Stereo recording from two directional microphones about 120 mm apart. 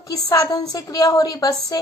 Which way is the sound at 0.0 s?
30° left (ahead or behind).